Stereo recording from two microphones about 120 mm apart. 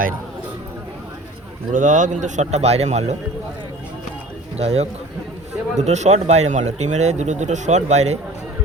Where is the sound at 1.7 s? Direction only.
90° right; by 3.2 s 65° right (ahead or behind).